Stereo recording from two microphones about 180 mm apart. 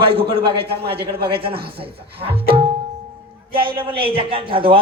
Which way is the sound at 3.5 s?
55° right (ahead or behind).